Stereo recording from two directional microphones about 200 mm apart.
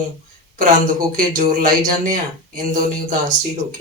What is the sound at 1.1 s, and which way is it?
Speech, 45° right (ahead or behind).